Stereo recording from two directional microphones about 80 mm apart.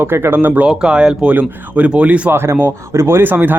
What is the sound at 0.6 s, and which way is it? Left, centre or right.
Speech, centre.